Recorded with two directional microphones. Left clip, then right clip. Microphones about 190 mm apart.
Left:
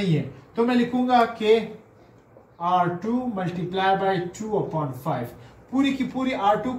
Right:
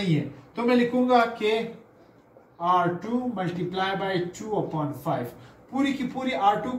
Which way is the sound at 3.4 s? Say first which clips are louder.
Left 4 dB; 15° left (ahead or behind).